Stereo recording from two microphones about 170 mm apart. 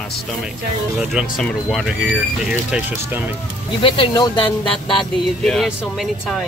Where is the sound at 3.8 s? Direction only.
30° left (ahead or behind).